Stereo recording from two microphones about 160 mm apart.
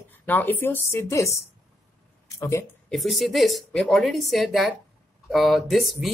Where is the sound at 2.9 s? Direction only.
Centre (ahead or behind).